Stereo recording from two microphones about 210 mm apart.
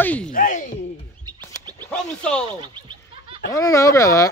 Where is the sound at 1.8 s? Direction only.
5° left (ahead or behind).